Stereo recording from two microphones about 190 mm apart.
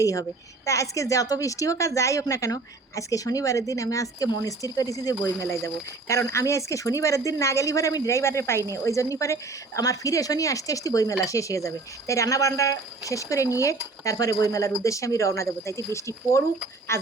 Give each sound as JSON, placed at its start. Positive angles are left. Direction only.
{"t": 0.0, "sound": "a woman's voice", "side_deg": 15}